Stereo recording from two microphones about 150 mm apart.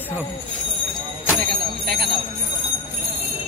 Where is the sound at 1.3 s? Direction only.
90° right.